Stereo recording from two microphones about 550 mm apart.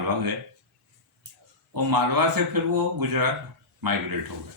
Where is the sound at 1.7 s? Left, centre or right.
Right.